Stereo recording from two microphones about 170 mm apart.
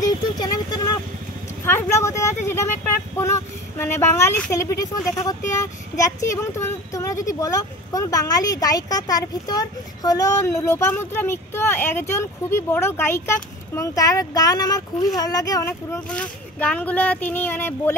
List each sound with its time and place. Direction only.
0.0 s vehicle: 25° left (ahead or behind)
1.6 s a sound: 15° left (ahead or behind)
3.2 s speech: 15° left (ahead or behind)